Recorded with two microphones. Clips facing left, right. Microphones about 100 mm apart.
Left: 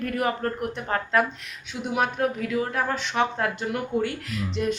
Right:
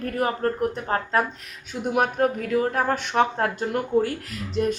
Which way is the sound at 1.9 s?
45° right (ahead or behind).